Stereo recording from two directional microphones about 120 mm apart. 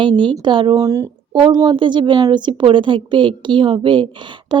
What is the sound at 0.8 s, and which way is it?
A woman's voice, 30° right (ahead or behind).